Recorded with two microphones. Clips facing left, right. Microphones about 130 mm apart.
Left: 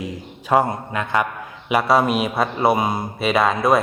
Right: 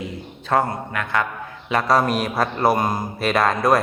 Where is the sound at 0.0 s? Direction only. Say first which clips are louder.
Left 1 dB; 15° left (ahead or behind).